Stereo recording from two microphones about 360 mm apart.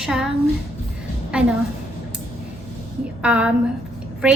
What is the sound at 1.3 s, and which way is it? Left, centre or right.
Speech, centre.